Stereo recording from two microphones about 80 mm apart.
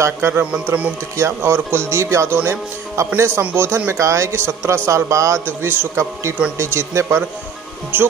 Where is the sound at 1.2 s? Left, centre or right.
Right.